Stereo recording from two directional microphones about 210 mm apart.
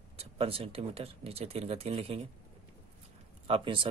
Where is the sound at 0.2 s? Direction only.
25° right (ahead or behind).